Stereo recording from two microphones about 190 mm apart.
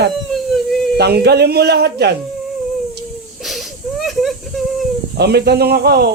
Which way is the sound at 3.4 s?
Centre (ahead or behind).